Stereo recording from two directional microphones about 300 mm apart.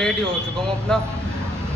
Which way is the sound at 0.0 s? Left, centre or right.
Centre.